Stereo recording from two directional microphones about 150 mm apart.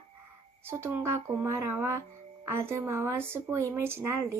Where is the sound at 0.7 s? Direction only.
15° right (ahead or behind).